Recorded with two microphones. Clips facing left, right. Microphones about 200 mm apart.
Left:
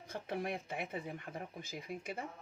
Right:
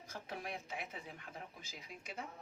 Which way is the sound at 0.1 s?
60° left (ahead or behind).